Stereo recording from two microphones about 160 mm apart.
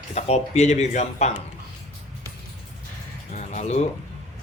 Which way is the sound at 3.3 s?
50° left (ahead or behind).